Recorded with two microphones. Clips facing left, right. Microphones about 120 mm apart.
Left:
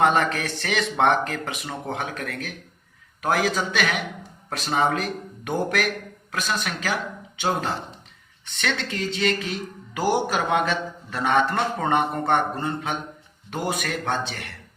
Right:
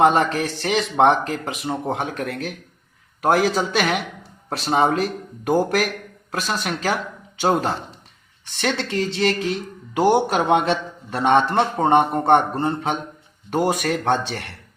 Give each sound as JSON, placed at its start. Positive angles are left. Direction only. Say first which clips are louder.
{"t": 0.0, "sound": "speech", "louder": "right 4 dB", "side_deg": -25}